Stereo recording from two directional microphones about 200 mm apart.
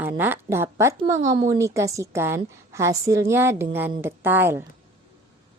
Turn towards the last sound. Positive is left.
turn(degrees=-10)  # may be behind; listen again after turning